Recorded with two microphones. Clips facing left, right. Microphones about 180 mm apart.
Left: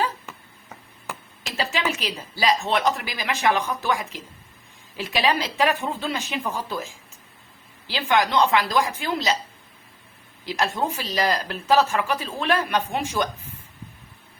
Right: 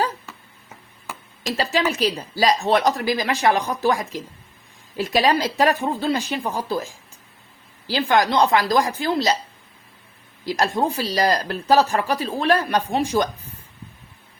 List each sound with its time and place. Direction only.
1.5 s speech: 40° right (ahead or behind)
7.9 s speech: 40° right (ahead or behind)
10.4 s speech: 40° right (ahead or behind)